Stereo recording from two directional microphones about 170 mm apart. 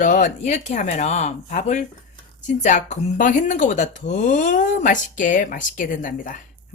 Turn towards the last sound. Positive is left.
turn(degrees=50)  # may be behind; listen again after turning